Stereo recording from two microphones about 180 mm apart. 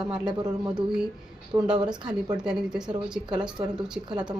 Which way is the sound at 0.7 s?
5° right (ahead or behind).